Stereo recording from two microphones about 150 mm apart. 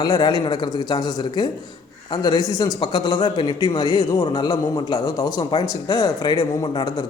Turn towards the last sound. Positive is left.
turn(degrees=25)  # may be behind; listen again after turning